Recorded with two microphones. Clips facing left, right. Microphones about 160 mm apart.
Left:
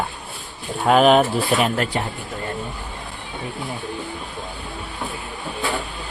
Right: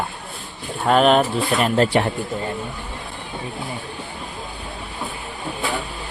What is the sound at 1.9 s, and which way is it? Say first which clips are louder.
Speech: right 6 dB; 85° right.